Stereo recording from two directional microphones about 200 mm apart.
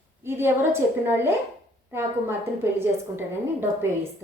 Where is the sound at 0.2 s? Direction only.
10° right (ahead or behind).